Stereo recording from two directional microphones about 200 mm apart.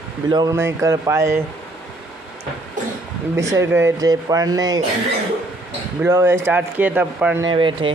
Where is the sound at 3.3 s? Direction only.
15° right (ahead or behind).